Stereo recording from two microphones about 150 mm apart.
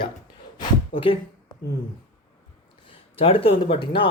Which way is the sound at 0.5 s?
35° left (ahead or behind).